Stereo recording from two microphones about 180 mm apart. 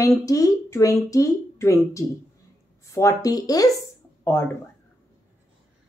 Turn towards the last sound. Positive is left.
turn(degrees=15)  # may be behind; listen again after turning